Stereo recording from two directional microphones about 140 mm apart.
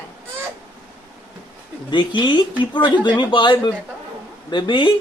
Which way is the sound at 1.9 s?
35° left (ahead or behind).